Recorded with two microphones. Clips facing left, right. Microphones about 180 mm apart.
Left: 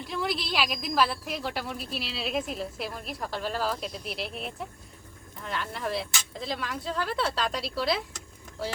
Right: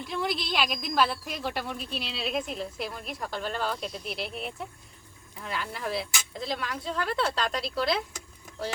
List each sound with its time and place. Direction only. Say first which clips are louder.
0.0 s a woman's voice: even; centre (ahead or behind)